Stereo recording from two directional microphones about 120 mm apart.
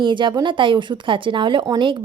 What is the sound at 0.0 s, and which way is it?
Speech, 40° right (ahead or behind).